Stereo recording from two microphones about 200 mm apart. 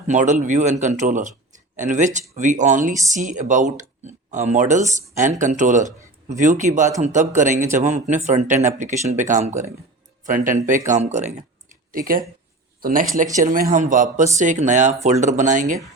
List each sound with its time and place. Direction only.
0.1 s speech: 40° right (ahead or behind)